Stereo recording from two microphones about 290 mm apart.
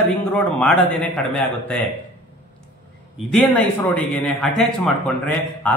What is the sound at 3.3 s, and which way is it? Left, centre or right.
A man's voice, centre.